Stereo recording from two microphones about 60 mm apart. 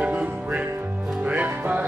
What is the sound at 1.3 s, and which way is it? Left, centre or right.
Music, right.